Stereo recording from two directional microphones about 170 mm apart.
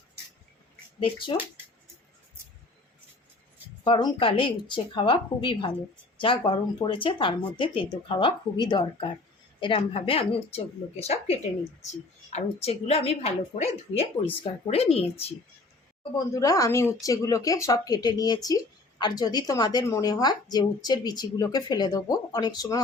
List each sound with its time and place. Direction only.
0.9 s a woman's voice: 30° left (ahead or behind)
3.8 s a woman's voice: 30° left (ahead or behind)
16.1 s speech: 20° left (ahead or behind)